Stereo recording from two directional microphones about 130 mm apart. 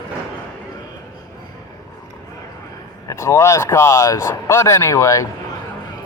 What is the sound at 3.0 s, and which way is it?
Speech, 25° left (ahead or behind).